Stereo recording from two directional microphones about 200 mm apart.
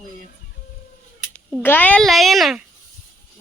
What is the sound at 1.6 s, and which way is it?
A child's voice, 10° left (ahead or behind).